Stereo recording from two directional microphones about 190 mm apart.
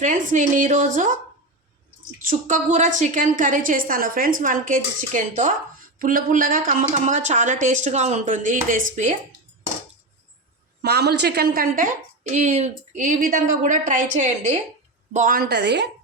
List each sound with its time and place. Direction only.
0.0 s speech: 40° right (ahead or behind)
2.2 s a woman's voice: 40° right (ahead or behind)
10.8 s a woman's voice: 60° right (ahead or behind)